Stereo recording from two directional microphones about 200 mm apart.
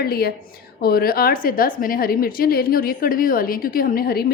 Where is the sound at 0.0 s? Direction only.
50° left (ahead or behind).